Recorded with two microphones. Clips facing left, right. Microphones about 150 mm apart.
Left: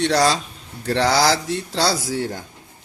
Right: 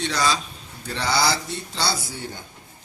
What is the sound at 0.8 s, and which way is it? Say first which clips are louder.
Cutlery: left 6 dB; 90° left.